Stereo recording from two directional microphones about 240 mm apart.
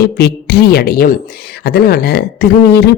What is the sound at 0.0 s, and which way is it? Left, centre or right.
Speech, left.